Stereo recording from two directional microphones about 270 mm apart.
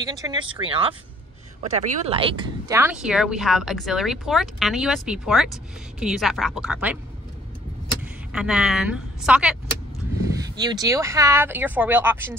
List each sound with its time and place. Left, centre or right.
0.0 s a woman's voice: centre
8.3 s a woman's voice: centre
10.6 s speech: centre